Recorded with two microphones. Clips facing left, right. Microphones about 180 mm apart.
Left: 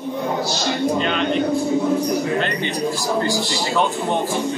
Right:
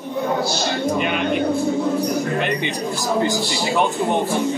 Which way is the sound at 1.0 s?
10° right (ahead or behind).